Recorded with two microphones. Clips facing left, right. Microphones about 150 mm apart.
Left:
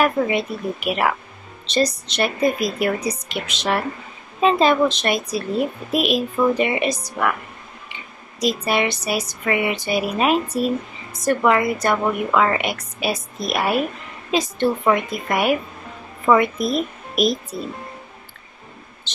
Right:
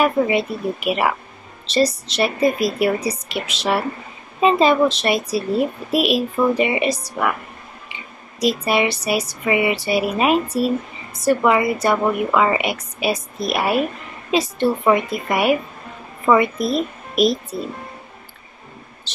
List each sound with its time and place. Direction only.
0.0 s speech: centre (ahead or behind)
8.6 s a sound: 5° right (ahead or behind)
9.8 s speech: 5° right (ahead or behind)
16.5 s speech: 35° right (ahead or behind)